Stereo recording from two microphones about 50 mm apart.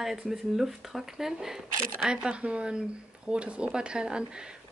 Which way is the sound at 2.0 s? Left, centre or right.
Right.